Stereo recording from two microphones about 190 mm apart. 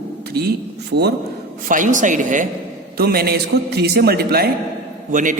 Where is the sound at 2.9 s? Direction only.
55° right (ahead or behind).